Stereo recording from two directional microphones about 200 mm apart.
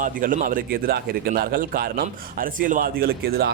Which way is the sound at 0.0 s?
40° right (ahead or behind).